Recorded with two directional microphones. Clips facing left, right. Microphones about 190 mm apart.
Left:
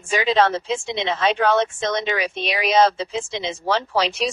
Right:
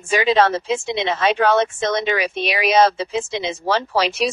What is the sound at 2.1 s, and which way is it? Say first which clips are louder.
Speech: right 3 dB; 65° right (ahead or behind).